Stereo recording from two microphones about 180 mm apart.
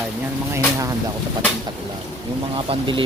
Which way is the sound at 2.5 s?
25° right (ahead or behind).